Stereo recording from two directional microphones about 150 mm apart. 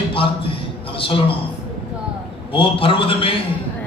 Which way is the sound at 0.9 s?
35° left (ahead or behind).